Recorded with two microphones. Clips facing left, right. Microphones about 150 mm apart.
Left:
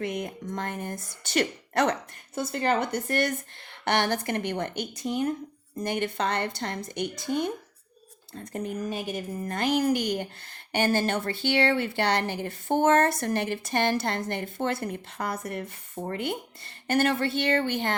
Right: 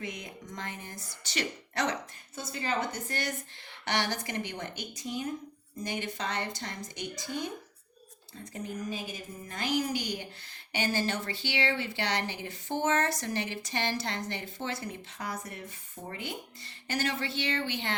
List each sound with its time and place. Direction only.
0.0 s a woman's voice: 60° left (ahead or behind)